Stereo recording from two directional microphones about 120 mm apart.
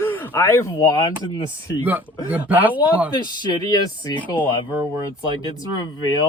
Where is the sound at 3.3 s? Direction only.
35° left (ahead or behind).